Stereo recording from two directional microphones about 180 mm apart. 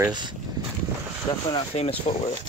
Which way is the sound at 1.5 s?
35° left (ahead or behind).